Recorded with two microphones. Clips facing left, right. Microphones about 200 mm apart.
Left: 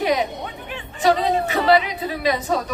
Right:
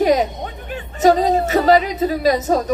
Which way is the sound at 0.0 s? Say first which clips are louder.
Right 5 dB; 40° right (ahead or behind).